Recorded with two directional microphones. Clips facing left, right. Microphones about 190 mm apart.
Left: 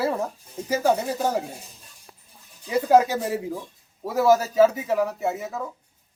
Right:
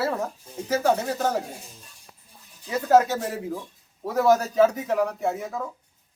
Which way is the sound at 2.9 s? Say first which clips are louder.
Even; 15° left (ahead or behind).